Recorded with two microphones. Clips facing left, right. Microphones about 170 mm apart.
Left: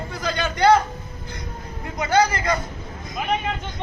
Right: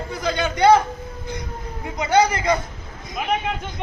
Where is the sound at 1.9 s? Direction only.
20° right (ahead or behind).